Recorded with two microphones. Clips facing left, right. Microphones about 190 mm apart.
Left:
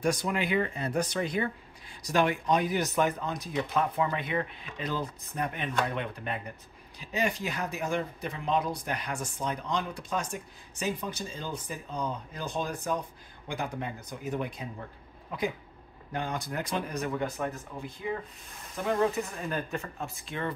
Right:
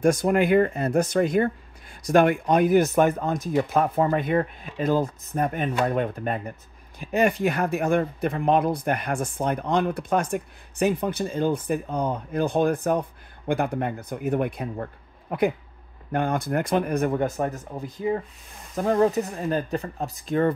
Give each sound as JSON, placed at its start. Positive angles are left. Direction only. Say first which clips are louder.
{"t": 0.0, "sound": "speech", "louder": "right 9 dB", "side_deg": -50}